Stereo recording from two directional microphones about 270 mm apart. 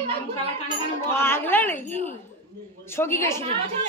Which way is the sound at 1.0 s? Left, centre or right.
Centre.